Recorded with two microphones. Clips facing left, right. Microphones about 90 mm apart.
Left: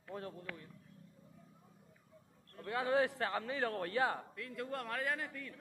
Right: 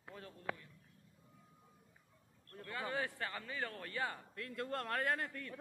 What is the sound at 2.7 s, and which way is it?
A man's voice, 65° left (ahead or behind).